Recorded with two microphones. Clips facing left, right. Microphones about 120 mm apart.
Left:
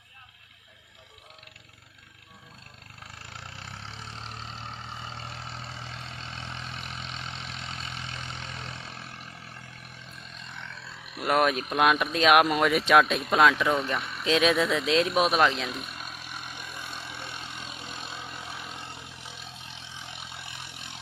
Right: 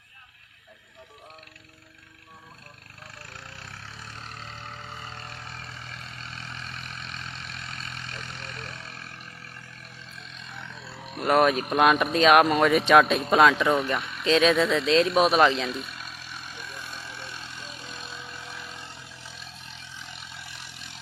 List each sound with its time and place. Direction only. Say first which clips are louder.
3.5 s vehicle: left 1 dB; 25° left (ahead or behind)
11.2 s speech: right 3 dB; centre (ahead or behind)
16.1 s vehicle: left 1 dB; 50° left (ahead or behind)
16.5 s vehicle: even; 15° left (ahead or behind)
20.0 s vehicle: left 2 dB; 60° left (ahead or behind)